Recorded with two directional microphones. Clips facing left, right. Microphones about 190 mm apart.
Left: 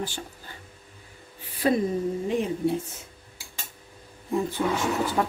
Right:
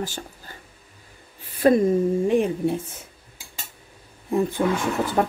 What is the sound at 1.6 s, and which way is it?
Speech, 50° right (ahead or behind).